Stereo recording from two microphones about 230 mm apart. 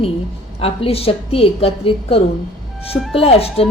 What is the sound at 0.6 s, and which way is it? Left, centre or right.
A woman's voice, left.